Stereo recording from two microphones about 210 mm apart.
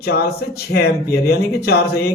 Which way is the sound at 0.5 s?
50° left (ahead or behind).